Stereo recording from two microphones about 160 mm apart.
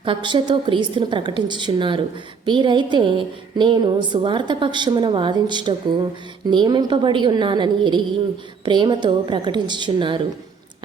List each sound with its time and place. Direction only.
0.0 s a woman's voice: 30° right (ahead or behind)